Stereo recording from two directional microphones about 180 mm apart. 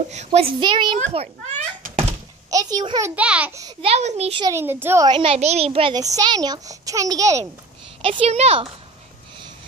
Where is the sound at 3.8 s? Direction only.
35° right (ahead or behind).